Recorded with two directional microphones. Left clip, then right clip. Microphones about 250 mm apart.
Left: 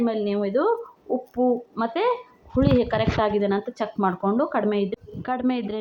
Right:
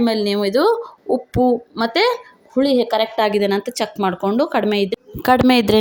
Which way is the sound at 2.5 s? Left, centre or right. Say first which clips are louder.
Right 5 dB; right.